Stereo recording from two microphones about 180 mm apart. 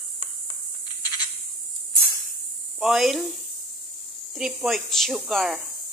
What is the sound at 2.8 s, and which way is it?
Speech, centre (ahead or behind).